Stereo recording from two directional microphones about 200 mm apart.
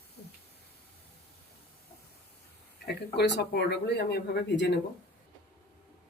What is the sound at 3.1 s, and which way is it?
Speech, 55° left (ahead or behind).